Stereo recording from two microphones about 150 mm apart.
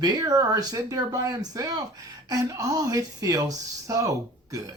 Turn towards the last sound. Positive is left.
turn(degrees=-20)  # may be behind; listen again after turning